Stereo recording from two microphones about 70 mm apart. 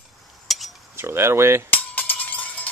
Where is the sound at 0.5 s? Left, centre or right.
Centre.